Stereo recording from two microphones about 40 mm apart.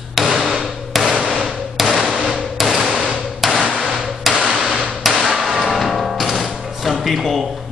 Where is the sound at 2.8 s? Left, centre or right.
Centre.